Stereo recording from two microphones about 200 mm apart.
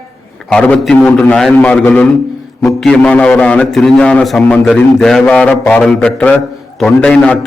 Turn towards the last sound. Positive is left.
turn(degrees=5)  # may be behind; listen again after turning